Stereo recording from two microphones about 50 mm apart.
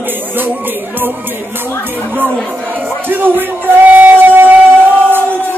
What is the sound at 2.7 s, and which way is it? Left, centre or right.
Speech, right.